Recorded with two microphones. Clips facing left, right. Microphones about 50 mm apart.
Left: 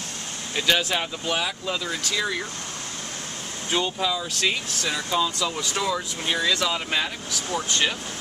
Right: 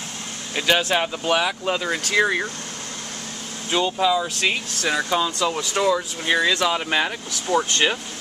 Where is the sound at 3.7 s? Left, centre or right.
Centre.